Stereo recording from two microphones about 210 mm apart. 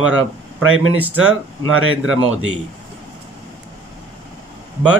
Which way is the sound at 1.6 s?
75° right (ahead or behind).